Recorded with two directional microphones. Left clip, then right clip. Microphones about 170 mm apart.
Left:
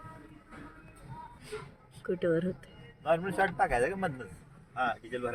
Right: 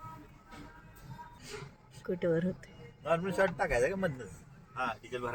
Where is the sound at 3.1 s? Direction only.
40° right (ahead or behind).